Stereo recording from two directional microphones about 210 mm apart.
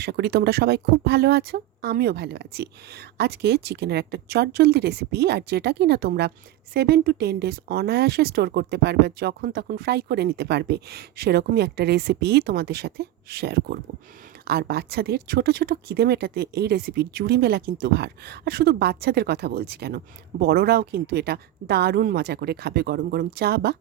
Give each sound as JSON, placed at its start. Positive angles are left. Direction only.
{"t": 0.0, "sound": "speech", "side_deg": -50}